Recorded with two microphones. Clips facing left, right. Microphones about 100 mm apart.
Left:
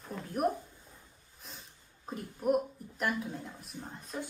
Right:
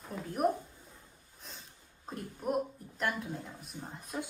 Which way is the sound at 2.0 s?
10° left (ahead or behind).